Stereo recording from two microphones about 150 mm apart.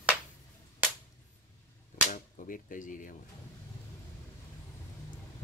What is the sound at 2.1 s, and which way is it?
Cap gun, 60° left (ahead or behind).